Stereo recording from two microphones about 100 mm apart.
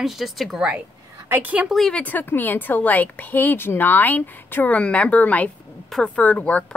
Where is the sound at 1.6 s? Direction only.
Centre (ahead or behind).